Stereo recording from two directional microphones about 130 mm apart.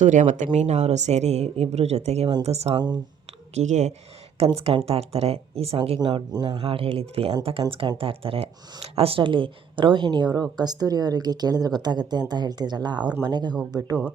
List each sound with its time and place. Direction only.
0.0 s a woman's voice: 70° right (ahead or behind); by 2.7 s 55° right (ahead or behind)
2.7 s speech: 35° right (ahead or behind)
3.5 s a woman's voice: 65° right (ahead or behind)
4.4 s speech: 50° right (ahead or behind)
6.0 s speech: 35° right (ahead or behind)